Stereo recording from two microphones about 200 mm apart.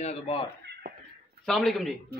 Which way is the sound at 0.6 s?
55° right (ahead or behind).